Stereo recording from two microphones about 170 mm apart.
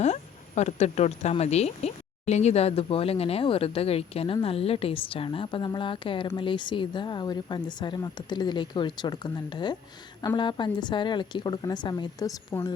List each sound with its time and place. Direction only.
0.0 s speech: 40° left (ahead or behind); by 12.7 s 20° left (ahead or behind)